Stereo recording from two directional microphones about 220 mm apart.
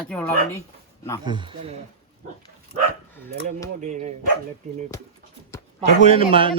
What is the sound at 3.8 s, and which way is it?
Speech, 35° right (ahead or behind).